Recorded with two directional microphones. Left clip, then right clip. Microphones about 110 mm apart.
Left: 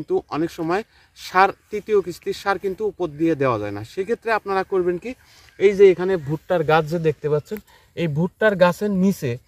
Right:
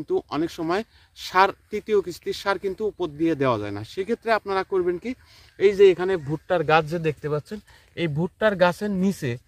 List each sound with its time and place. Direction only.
0.1 s speech: 10° right (ahead or behind)
6.2 s speech: 20° left (ahead or behind)